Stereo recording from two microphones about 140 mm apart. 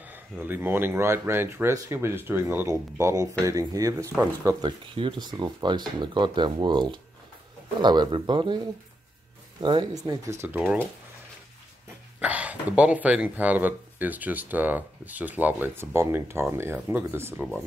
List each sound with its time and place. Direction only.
0.0 s speech: 15° right (ahead or behind); by 8.5 s 35° right (ahead or behind)
9.6 s speech: 35° right (ahead or behind); by 10.8 s 10° right (ahead or behind)
12.2 s speech: 10° right (ahead or behind)